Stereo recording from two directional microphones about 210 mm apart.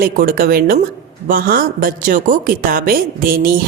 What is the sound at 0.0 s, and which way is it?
A woman's voice, 45° right (ahead or behind).